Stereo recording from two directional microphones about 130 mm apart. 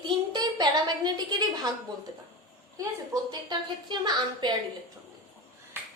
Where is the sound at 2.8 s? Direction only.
25° right (ahead or behind).